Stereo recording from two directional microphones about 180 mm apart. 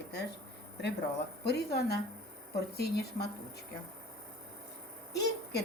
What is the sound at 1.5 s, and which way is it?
A woman's voice, 65° left (ahead or behind).